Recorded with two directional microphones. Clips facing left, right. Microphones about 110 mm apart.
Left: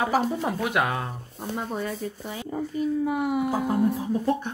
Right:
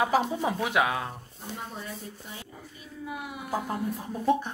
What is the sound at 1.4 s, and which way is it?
Speech, 75° left (ahead or behind).